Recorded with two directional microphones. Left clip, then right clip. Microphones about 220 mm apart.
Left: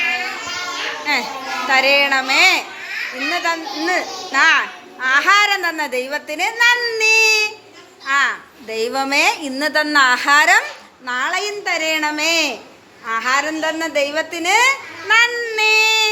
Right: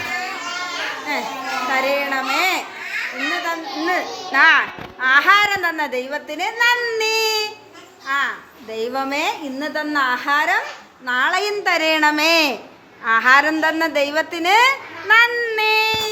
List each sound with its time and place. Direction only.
1.1 s a sound: centre (ahead or behind)
1.7 s a child's voice: centre (ahead or behind)
11.0 s a child's voice: 10° right (ahead or behind)